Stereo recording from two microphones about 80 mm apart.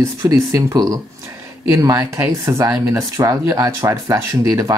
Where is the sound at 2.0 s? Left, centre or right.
Right.